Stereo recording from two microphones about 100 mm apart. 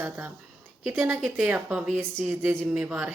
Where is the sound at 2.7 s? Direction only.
10° right (ahead or behind).